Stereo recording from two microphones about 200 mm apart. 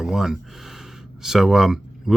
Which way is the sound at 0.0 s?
5° right (ahead or behind).